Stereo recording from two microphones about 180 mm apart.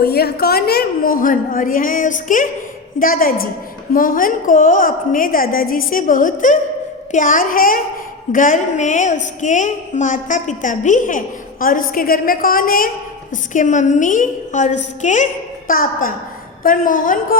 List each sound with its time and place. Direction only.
0.0 s a woman's voice: 60° left (ahead or behind)